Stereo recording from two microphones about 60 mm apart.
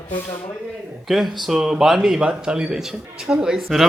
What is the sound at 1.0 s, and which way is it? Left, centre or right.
A man's voice, centre.